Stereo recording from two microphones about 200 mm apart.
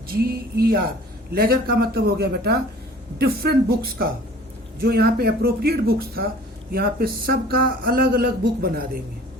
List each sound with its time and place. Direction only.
0.1 s speech: 50° right (ahead or behind)